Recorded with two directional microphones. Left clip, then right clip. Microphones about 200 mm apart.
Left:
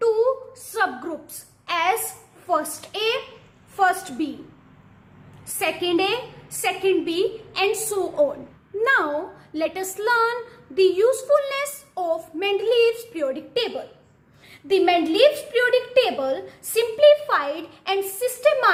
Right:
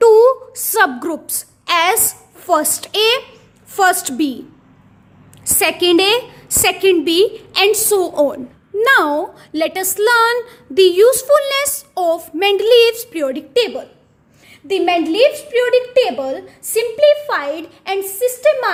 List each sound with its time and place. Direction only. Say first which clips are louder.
0.0 s a sound: right 11 dB; 60° right (ahead or behind)
2.5 s a woman's voice: right 8 dB; 50° right (ahead or behind)
5.5 s a woman's voice: right 9 dB; 55° right (ahead or behind)
14.7 s a woman's voice: right 3 dB; 30° right (ahead or behind)